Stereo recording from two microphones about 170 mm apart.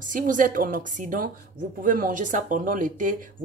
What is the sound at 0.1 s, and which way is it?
Speech, 50° right (ahead or behind).